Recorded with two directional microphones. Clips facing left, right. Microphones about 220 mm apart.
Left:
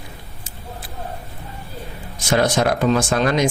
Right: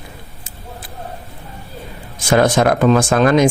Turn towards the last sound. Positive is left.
turn(degrees=-55)  # may be behind; listen again after turning